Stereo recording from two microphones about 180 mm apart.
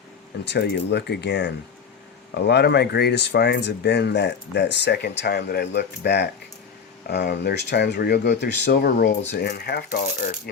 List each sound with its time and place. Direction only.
0.4 s speech: 70° left (ahead or behind); by 10.5 s 50° left (ahead or behind)